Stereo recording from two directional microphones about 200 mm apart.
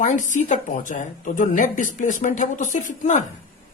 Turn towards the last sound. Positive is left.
turn(degrees=40)  # may be behind; listen again after turning